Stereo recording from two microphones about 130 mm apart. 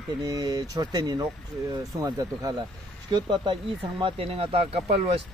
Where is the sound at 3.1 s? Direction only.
35° right (ahead or behind).